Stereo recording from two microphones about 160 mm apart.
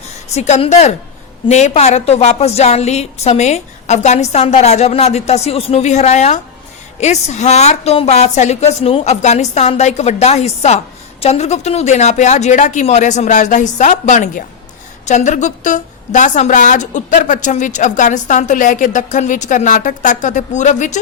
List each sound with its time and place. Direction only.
0.3 s a woman's voice: 45° left (ahead or behind)